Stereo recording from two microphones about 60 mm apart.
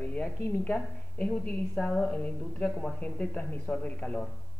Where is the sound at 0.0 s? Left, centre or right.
Centre.